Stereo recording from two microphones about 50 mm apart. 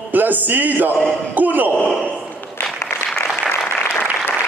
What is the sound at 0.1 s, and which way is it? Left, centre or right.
A man's voice, right.